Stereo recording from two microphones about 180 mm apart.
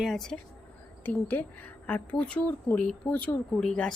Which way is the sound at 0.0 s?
Centre (ahead or behind).